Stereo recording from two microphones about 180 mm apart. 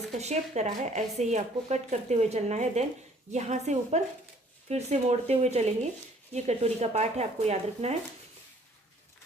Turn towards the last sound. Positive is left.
turn(degrees=-35)  # may be behind; listen again after turning